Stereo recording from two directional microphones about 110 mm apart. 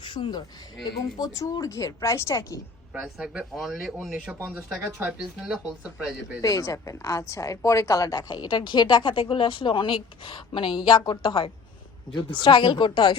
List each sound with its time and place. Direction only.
0.0 s speech: 45° left (ahead or behind)
1.2 s a woman's voice: 30° left (ahead or behind)
2.9 s speech: 10° right (ahead or behind)
6.4 s a woman's voice: 30° left (ahead or behind)